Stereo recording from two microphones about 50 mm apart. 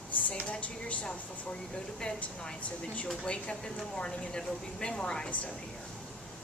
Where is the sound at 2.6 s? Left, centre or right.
Left.